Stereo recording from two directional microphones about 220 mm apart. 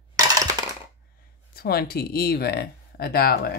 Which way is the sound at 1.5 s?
45° left (ahead or behind).